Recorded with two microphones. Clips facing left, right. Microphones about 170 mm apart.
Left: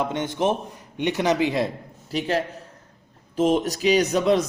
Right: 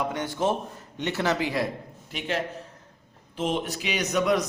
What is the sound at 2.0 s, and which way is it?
A man's voice, 35° left (ahead or behind).